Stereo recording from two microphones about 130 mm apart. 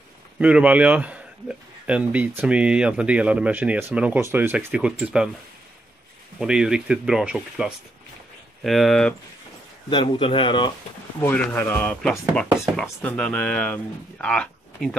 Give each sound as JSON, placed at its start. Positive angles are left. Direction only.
{"t": 0.4, "sound": "speech", "side_deg": -10}
{"t": 6.4, "sound": "speech", "side_deg": -5}
{"t": 9.8, "sound": "speech", "side_deg": 40}
{"t": 11.2, "sound": "speech", "side_deg": 15}